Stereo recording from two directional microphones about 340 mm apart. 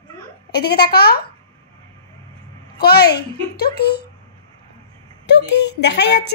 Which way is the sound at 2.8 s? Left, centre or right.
Left.